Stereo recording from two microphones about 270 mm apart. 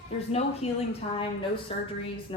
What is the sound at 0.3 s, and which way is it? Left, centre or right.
Speech, left.